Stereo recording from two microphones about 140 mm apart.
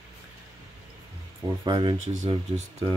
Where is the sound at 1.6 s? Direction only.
30° right (ahead or behind).